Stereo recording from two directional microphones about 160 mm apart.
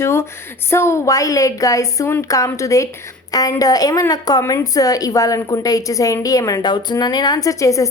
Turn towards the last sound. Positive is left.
turn(degrees=20)  # may be behind; listen again after turning